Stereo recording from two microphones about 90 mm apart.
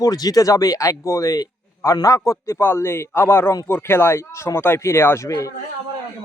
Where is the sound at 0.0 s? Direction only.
45° left (ahead or behind).